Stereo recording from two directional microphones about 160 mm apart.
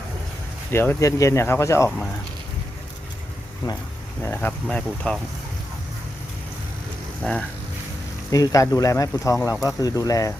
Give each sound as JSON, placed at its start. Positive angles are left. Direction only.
{"t": 0.7, "sound": "speech", "side_deg": 15}
{"t": 4.2, "sound": "speech", "side_deg": 15}
{"t": 7.2, "sound": "speech", "side_deg": 5}
{"t": 8.3, "sound": "speech", "side_deg": 20}